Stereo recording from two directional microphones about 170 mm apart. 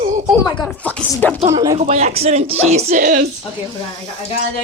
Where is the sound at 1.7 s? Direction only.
40° right (ahead or behind).